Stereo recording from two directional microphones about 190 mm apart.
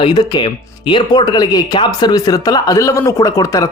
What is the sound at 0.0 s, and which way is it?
Speech, 20° left (ahead or behind).